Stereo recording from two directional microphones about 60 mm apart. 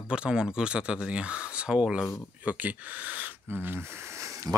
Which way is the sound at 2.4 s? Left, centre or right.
Right.